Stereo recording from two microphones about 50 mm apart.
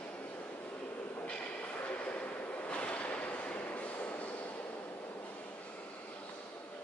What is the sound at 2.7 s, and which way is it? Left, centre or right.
Train, left.